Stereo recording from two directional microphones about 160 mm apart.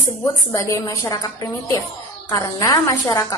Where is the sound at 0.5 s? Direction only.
20° left (ahead or behind).